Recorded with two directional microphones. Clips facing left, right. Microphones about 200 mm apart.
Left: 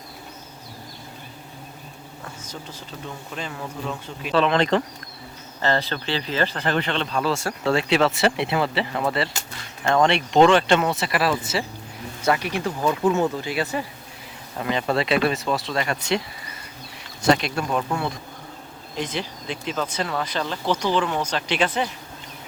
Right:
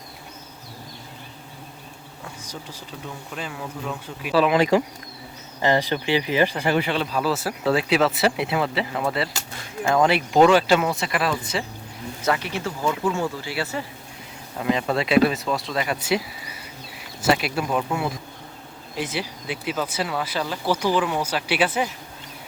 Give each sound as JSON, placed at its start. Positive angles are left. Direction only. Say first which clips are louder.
{"t": 2.2, "sound": "insect", "louder": "right 1 dB", "side_deg": -10}
{"t": 3.3, "sound": "speech", "louder": "even", "side_deg": -5}
{"t": 14.6, "sound": "speech", "louder": "right 1 dB", "side_deg": 0}